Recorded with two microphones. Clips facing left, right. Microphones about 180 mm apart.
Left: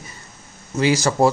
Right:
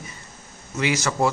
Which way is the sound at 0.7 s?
35° left (ahead or behind).